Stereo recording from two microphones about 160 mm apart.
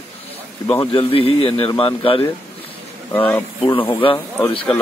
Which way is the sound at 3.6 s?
35° left (ahead or behind).